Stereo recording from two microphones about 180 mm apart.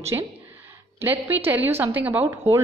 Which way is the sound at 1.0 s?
10° right (ahead or behind).